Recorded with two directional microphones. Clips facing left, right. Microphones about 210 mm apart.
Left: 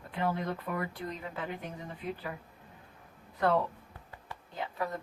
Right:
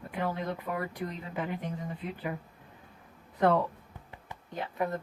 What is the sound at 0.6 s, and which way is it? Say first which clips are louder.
Speech: right 2 dB; 15° right (ahead or behind).